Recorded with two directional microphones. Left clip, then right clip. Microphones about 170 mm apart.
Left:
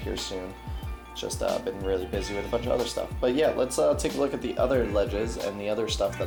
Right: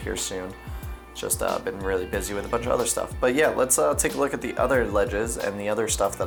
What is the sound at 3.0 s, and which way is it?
Speech, 40° right (ahead or behind).